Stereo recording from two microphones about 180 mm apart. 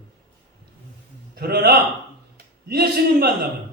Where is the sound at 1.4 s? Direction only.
60° right (ahead or behind).